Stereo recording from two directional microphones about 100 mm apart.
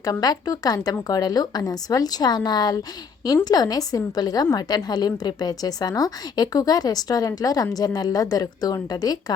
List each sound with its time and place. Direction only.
0.0 s a woman's voice: 40° left (ahead or behind)